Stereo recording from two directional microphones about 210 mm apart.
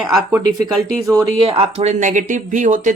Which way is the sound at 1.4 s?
25° right (ahead or behind).